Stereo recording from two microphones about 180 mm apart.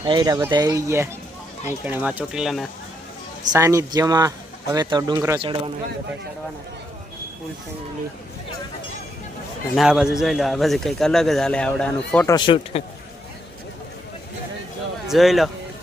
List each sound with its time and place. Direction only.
0.0 s speech: 25° right (ahead or behind); by 2.6 s centre (ahead or behind)
3.5 s speech: 15° right (ahead or behind)
9.7 s a man's voice: 5° right (ahead or behind)
12.2 s speech: 25° left (ahead or behind)
15.0 s speech: centre (ahead or behind)